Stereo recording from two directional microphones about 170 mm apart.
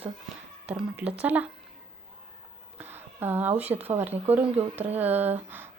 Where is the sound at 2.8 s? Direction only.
10° right (ahead or behind).